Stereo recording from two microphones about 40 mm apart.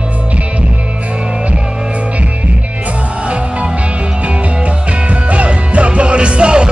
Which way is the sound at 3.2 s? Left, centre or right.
Right.